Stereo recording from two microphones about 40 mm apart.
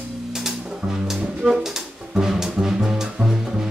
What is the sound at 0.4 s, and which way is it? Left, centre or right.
Music, centre.